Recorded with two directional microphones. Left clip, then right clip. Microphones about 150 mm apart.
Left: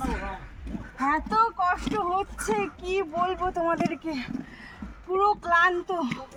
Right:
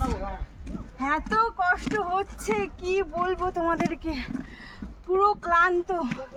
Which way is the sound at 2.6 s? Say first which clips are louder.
Right 1 dB; 50° right (ahead or behind).